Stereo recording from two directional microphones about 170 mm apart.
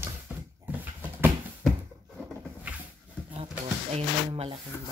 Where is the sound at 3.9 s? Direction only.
35° right (ahead or behind).